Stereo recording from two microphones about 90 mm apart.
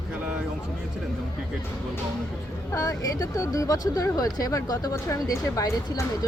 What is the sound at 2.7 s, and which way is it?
Speech, 40° left (ahead or behind).